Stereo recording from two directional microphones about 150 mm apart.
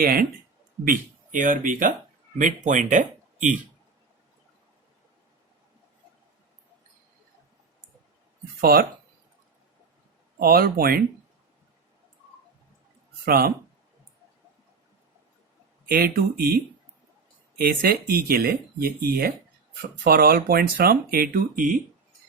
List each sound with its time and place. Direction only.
0.0 s speech: 80° right
0.9 s speech: 60° right (ahead or behind)
8.6 s speech: 80° right
10.3 s speech: 90° right
13.2 s speech: 90° right
15.9 s speech: 80° right
17.6 s speech: 75° right (ahead or behind)